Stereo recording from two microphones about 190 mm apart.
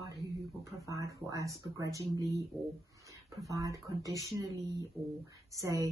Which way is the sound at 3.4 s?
15° right (ahead or behind).